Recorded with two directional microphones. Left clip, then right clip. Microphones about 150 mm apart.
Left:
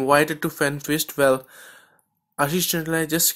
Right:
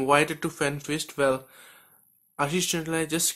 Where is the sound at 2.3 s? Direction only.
35° left (ahead or behind).